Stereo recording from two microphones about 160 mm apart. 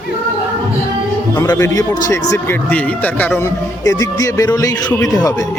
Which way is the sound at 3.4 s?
20° left (ahead or behind).